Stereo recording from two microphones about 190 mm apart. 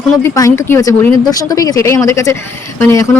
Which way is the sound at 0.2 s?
15° left (ahead or behind).